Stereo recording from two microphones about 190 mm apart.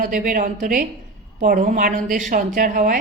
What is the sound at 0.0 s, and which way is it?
A woman's voice, 45° right (ahead or behind).